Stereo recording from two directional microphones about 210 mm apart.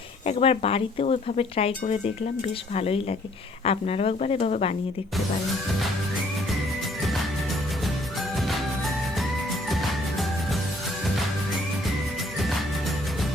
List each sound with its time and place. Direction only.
0.3 s speech: 30° left (ahead or behind)
8.4 s music: centre (ahead or behind)